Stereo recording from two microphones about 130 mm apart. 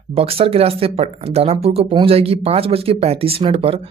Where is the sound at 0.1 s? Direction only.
50° right (ahead or behind).